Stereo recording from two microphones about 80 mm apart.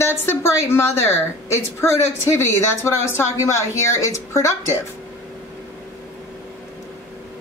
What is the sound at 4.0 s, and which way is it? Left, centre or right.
Speech, left.